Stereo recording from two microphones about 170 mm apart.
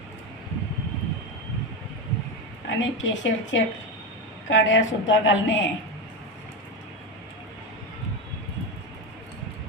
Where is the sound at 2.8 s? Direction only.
90° left.